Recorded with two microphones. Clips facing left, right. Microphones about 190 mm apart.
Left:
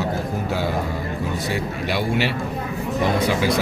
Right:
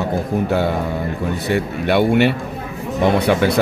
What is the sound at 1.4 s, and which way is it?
Speech, 60° right (ahead or behind).